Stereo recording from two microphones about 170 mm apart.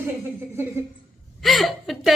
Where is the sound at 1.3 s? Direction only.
Centre (ahead or behind).